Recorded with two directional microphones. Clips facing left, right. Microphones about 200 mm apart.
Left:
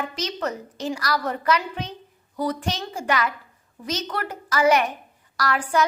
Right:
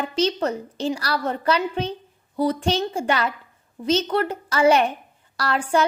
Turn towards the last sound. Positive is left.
turn(degrees=-30)  # may be behind; listen again after turning